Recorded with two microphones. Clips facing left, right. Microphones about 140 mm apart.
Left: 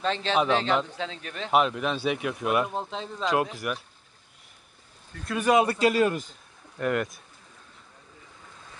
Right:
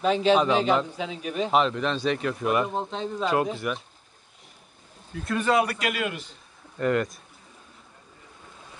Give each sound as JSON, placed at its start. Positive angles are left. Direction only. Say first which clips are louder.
{"t": 0.0, "sound": "speech", "louder": "right 5 dB", "side_deg": -10}
{"t": 1.5, "sound": "speech", "louder": "left 1 dB", "side_deg": 5}
{"t": 5.1, "sound": "speech", "louder": "right 3 dB", "side_deg": 0}
{"t": 5.4, "sound": "a man's voice", "louder": "left 3 dB", "side_deg": 20}
{"t": 6.8, "sound": "speech", "louder": "right 3 dB", "side_deg": 5}